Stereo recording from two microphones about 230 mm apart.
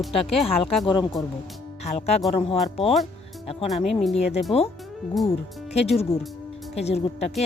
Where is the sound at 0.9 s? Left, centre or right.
Centre.